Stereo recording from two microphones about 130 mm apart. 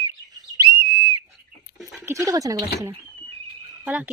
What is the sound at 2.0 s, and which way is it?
Speech, 20° right (ahead or behind).